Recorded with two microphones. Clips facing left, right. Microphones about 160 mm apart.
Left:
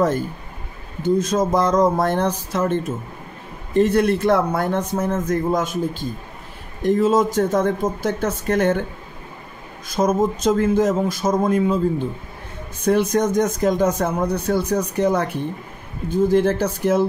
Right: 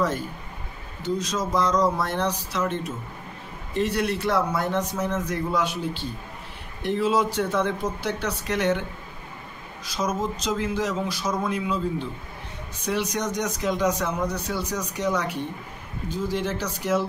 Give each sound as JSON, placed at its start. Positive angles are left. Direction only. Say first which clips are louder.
{"t": 1.0, "sound": "speech", "louder": "left 8 dB", "side_deg": 50}
{"t": 9.8, "sound": "speech", "louder": "left 8 dB", "side_deg": 50}